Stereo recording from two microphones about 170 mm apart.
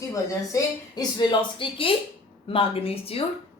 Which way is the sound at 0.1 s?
20° left (ahead or behind).